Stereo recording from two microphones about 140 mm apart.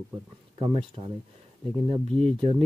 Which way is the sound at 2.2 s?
40° right (ahead or behind).